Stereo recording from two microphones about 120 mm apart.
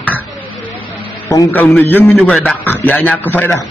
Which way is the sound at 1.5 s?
15° left (ahead or behind).